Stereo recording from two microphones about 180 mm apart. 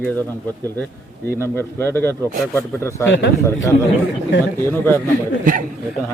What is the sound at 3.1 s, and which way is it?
Speech, 90° left.